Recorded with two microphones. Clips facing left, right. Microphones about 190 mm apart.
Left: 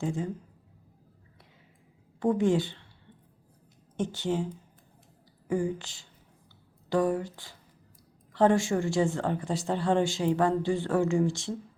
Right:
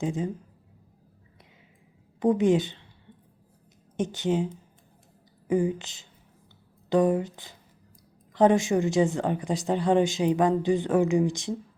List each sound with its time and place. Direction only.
0.0 s speech: 20° right (ahead or behind)
2.1 s a woman's voice: 20° right (ahead or behind)
3.9 s speech: 20° right (ahead or behind)
5.5 s speech: 20° right (ahead or behind)